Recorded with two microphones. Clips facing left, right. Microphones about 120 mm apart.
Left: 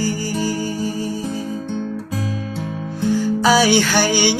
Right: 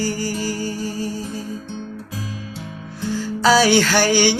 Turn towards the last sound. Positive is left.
turn(degrees=15)  # may be behind; listen again after turning